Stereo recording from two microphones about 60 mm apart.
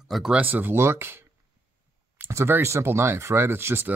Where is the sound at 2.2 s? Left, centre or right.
Right.